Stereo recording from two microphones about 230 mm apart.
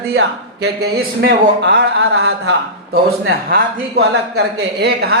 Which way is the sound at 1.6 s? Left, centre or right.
Right.